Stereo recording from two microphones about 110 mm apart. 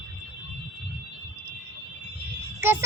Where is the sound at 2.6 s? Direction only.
20° right (ahead or behind).